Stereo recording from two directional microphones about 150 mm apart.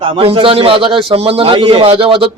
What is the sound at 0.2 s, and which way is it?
A man's voice, 40° right (ahead or behind).